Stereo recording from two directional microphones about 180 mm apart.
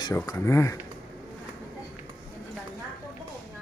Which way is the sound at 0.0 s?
15° left (ahead or behind).